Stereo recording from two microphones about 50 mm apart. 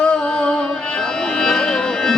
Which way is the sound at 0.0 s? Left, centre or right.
Centre.